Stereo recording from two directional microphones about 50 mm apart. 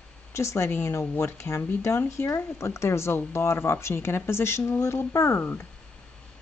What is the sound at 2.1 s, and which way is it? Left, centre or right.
Speech, left.